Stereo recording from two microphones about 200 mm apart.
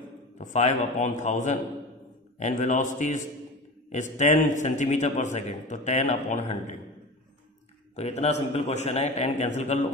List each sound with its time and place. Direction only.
0.4 s a man's voice: 35° left (ahead or behind)
7.9 s a man's voice: 35° left (ahead or behind)